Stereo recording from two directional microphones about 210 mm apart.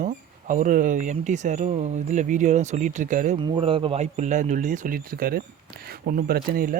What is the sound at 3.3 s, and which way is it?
Speech, 25° right (ahead or behind).